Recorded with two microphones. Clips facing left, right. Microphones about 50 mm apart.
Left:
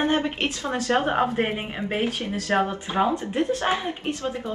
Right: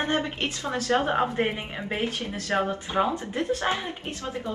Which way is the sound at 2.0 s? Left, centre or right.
Left.